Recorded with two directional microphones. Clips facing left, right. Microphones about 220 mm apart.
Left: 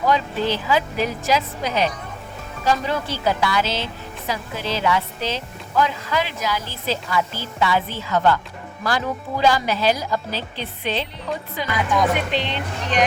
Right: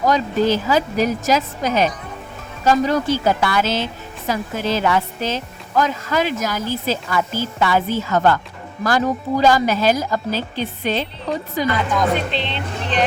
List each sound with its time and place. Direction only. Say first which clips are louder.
0.0 s a woman's voice: right 4 dB; 40° right (ahead or behind)
12.3 s speech: even; 10° left (ahead or behind)